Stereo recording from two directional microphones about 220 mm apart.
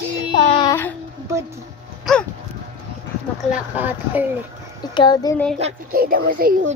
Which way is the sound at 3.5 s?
10° right (ahead or behind).